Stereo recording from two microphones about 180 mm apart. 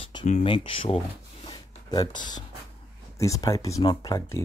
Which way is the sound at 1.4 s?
25° left (ahead or behind).